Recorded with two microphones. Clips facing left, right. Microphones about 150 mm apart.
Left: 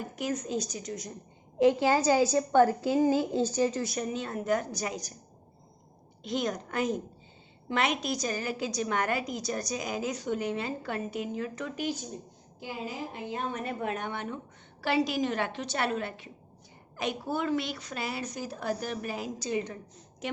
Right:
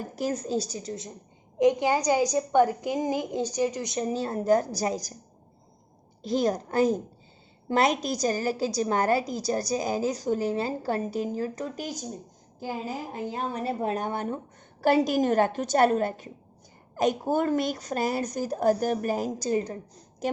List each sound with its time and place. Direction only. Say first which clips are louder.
0.0 s a woman's voice: right 3 dB; 35° right (ahead or behind)
1.5 s a woman's voice: right 1 dB; 15° right (ahead or behind)
4.0 s a woman's voice: right 5 dB; 35° right (ahead or behind)
6.2 s a woman's voice: right 6 dB; 35° right (ahead or behind)
13.1 s a woman's voice: right 4 dB; 40° right (ahead or behind)